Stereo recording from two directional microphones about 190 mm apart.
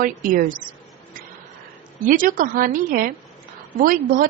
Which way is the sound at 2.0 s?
45° right (ahead or behind).